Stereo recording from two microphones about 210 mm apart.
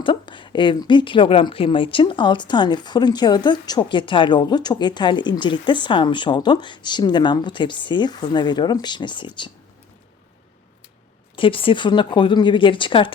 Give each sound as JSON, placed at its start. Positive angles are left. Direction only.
{"t": 0.0, "sound": "a woman's voice", "side_deg": 25}
{"t": 11.3, "sound": "a woman's voice", "side_deg": 25}